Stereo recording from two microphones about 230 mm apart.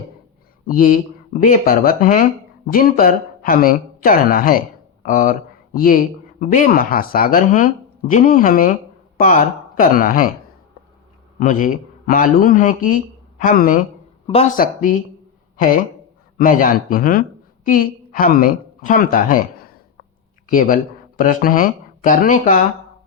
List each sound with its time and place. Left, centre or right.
0.7 s speech: left
11.3 s a woman's voice: left
20.5 s speech: left